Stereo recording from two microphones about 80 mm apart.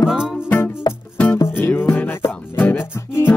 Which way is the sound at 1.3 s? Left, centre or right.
Left.